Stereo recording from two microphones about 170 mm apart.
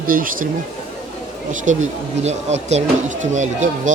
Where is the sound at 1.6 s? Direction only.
45° right (ahead or behind).